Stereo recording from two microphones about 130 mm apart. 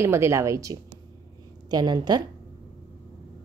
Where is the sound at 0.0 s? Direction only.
20° right (ahead or behind).